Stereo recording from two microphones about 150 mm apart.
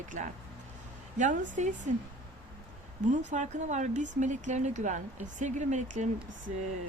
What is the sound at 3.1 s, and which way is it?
Speech, 55° right (ahead or behind).